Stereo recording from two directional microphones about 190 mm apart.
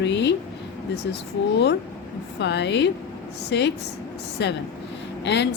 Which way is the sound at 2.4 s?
65° left (ahead or behind).